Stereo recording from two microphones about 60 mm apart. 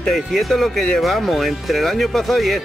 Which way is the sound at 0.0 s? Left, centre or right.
Centre.